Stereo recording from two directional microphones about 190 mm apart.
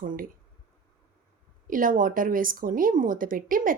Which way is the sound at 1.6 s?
45° right (ahead or behind).